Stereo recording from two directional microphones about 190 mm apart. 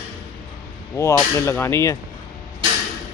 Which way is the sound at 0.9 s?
15° left (ahead or behind).